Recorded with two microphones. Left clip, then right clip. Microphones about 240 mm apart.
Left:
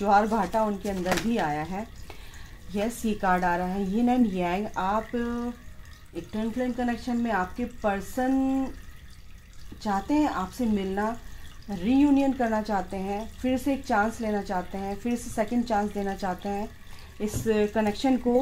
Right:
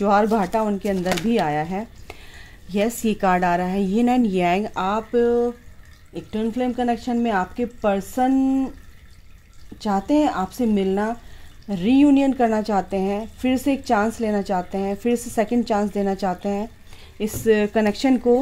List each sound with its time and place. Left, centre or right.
0.0 s speech: right
9.8 s speech: right